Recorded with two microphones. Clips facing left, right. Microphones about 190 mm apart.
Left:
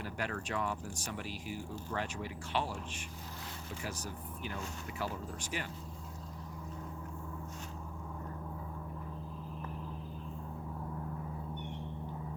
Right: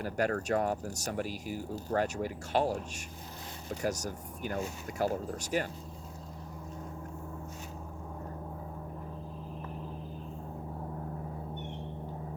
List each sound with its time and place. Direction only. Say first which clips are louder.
0.0 s speech: right 8 dB; 40° right (ahead or behind)